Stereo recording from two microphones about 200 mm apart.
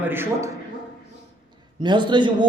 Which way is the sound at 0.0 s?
10° right (ahead or behind).